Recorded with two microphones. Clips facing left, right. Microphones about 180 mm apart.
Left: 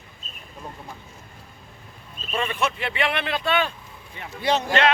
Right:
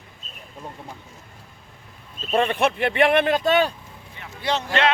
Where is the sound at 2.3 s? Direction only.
60° right (ahead or behind); by 3.7 s 40° right (ahead or behind).